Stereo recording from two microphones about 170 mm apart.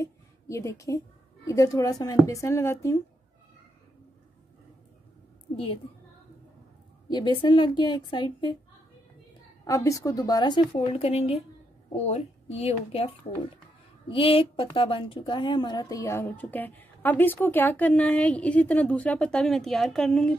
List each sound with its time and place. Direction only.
0.0 s a sound: 15° left (ahead or behind)
1.4 s speech: 20° left (ahead or behind)
7.1 s speech: 25° left (ahead or behind)
9.7 s a woman's voice: 20° left (ahead or behind); by 20.3 s 5° left (ahead or behind)